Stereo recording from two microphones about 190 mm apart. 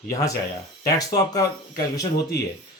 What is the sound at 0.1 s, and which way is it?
Speech, 15° left (ahead or behind).